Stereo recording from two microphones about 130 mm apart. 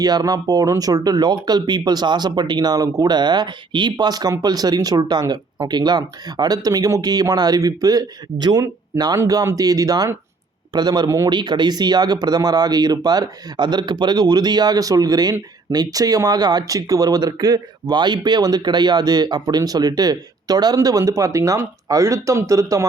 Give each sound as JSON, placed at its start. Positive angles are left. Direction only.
{"t": 0.0, "sound": "speech", "side_deg": -30}